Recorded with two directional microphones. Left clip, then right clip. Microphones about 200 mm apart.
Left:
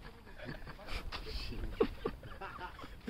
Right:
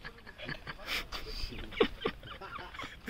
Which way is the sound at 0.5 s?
5° right (ahead or behind).